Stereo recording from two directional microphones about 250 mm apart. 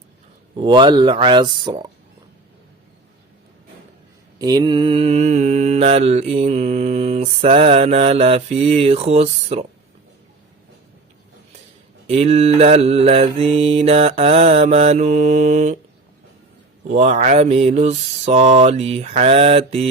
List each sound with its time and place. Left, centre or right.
0.5 s mantra: centre
4.4 s mantra: centre
12.0 s mantra: right
16.9 s mantra: right